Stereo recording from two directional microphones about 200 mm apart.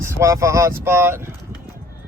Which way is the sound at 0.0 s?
15° right (ahead or behind).